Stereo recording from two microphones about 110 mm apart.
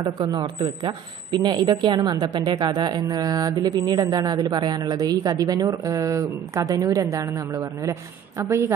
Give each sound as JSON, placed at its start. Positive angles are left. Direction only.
{"t": 0.2, "sound": "speech", "side_deg": -45}